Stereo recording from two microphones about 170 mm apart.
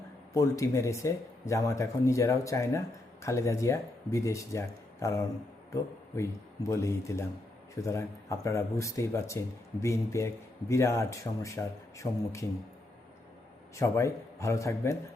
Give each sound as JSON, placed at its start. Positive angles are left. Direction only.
{"t": 0.3, "sound": "a man's voice", "side_deg": 20}
{"t": 13.7, "sound": "a man's voice", "side_deg": 15}